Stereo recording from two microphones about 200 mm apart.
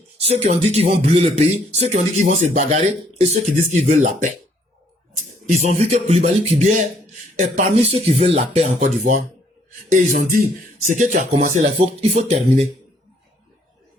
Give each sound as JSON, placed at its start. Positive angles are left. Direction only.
{"t": 0.3, "sound": "speech", "side_deg": -35}
{"t": 5.5, "sound": "speech", "side_deg": -35}